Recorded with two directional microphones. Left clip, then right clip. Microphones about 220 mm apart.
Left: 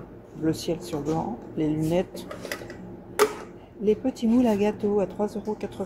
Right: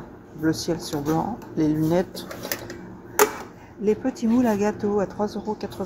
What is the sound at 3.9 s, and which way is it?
Speech, 5° left (ahead or behind).